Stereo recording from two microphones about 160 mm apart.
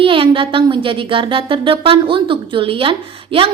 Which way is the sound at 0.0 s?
35° right (ahead or behind).